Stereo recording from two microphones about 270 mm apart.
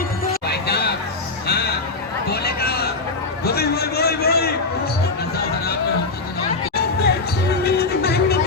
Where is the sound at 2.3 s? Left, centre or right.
Left.